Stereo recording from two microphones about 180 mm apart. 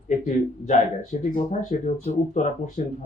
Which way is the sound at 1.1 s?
45° left (ahead or behind).